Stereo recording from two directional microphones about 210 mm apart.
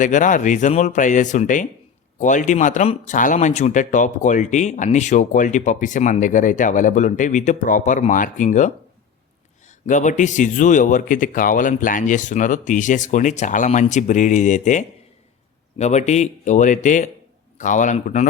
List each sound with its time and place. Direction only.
0.0 s speech: 35° left (ahead or behind)